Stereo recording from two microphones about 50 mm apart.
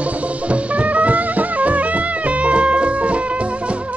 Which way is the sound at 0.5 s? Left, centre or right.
Right.